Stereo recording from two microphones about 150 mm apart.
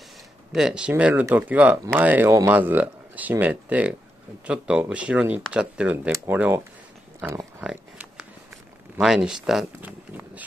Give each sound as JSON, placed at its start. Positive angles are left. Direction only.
{"t": 0.5, "sound": "speech", "side_deg": -5}
{"t": 7.6, "sound": "a sound", "side_deg": -5}
{"t": 9.0, "sound": "speech", "side_deg": -5}